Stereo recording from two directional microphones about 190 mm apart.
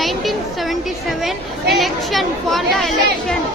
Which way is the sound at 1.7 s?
Centre (ahead or behind).